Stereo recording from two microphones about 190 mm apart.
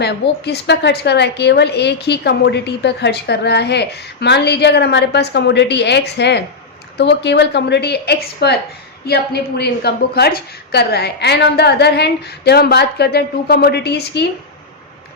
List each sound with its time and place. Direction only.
0.0 s a woman's voice: 60° left (ahead or behind)